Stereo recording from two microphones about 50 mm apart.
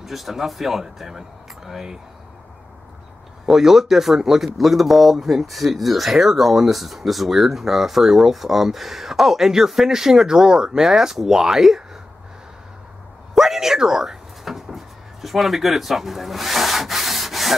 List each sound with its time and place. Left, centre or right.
0.0 s speech: centre
3.4 s speech: centre
13.3 s a sound: centre
15.2 s rub: centre